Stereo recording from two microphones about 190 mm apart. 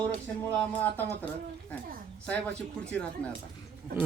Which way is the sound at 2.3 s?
5° left (ahead or behind).